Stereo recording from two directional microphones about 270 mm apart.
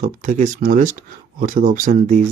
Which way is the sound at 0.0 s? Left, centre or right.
Right.